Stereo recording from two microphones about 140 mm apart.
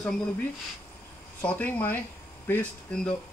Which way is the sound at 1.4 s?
10° left (ahead or behind).